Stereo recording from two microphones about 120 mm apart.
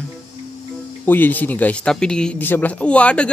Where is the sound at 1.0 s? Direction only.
15° left (ahead or behind).